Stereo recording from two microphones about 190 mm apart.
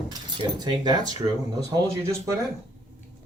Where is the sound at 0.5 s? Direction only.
20° right (ahead or behind).